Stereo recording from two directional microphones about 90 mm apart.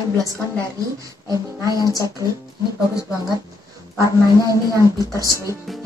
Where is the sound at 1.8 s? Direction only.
40° left (ahead or behind).